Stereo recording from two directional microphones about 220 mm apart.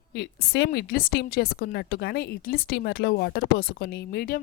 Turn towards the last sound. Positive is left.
turn(degrees=45)  # may be behind; listen again after turning